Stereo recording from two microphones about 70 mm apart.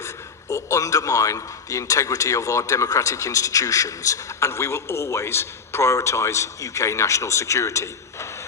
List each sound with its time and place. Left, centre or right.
0.0 s a man's voice: left